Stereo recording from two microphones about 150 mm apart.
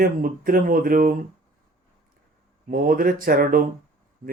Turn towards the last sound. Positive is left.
turn(degrees=-70)  # may be behind; listen again after turning